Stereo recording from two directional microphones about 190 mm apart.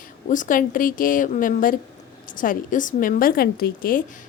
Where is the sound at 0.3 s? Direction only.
45° left (ahead or behind).